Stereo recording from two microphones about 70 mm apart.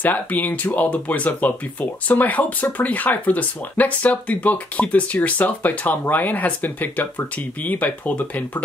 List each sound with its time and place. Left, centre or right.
0.0 s speech: left